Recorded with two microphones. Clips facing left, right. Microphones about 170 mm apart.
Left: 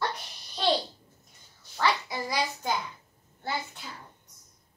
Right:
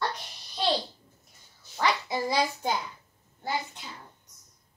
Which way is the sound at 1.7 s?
15° right (ahead or behind).